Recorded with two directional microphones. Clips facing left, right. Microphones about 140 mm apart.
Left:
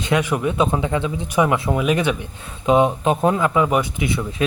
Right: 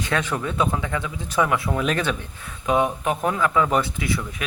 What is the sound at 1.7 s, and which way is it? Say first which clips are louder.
Speech: left 4 dB; 10° left (ahead or behind).